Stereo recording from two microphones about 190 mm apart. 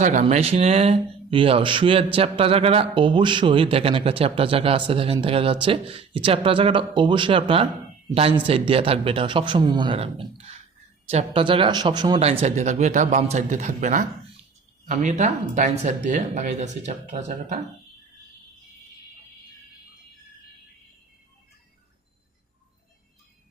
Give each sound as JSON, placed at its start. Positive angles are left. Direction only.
{"t": 0.0, "sound": "speech", "side_deg": -40}